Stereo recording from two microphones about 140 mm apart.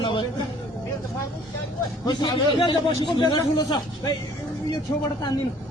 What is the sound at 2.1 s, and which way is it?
A man's voice, 30° left (ahead or behind).